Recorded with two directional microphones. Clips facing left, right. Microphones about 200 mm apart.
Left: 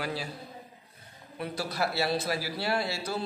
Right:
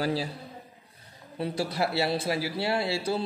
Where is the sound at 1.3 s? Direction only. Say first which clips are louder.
Right 4 dB; 30° right (ahead or behind).